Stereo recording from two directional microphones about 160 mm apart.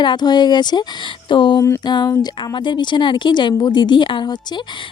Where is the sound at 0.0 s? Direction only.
30° left (ahead or behind).